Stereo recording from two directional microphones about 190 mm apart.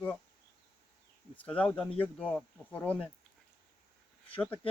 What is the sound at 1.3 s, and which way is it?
Speech, 5° left (ahead or behind).